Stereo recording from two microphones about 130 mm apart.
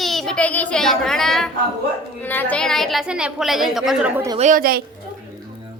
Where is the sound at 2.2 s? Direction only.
15° left (ahead or behind); by 4.1 s 5° right (ahead or behind).